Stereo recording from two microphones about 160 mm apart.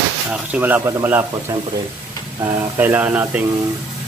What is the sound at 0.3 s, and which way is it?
Speech, 10° right (ahead or behind).